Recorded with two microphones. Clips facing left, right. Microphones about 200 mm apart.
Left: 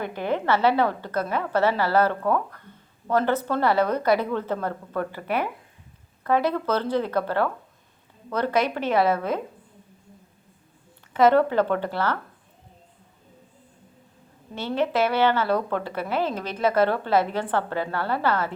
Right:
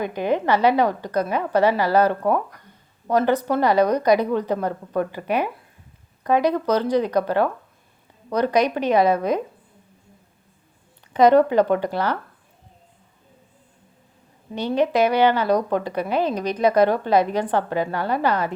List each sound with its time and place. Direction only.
0.0 s a woman's voice: 15° right (ahead or behind)
11.1 s a woman's voice: 15° right (ahead or behind)
14.5 s a woman's voice: 15° right (ahead or behind)